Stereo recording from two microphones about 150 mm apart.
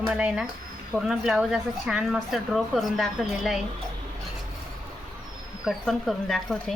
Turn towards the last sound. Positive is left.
turn(degrees=0)  # may be behind; listen again after turning